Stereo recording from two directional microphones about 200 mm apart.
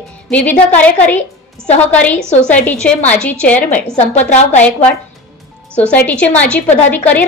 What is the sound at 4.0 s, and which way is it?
Speech, 35° left (ahead or behind).